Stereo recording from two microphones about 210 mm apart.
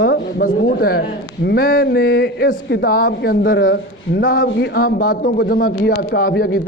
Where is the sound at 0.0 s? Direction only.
45° left (ahead or behind).